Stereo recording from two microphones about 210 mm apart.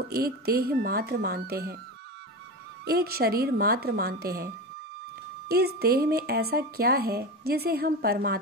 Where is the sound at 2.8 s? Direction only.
45° right (ahead or behind).